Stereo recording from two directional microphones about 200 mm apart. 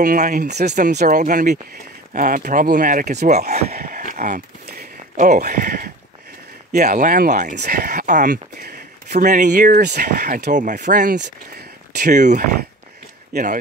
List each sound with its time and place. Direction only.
0.0 s speech: 40° right (ahead or behind)
3.6 s speech: 50° right (ahead or behind)
6.8 s speech: 40° right (ahead or behind)
9.3 s speech: 40° right (ahead or behind)
11.1 s speech: 55° right (ahead or behind)
12.1 s speech: 35° right (ahead or behind)